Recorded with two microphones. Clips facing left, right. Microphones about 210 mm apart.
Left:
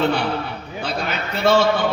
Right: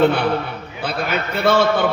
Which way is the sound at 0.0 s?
55° right (ahead or behind).